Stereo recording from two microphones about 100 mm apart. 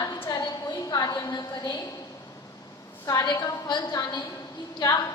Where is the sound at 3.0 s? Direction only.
45° left (ahead or behind).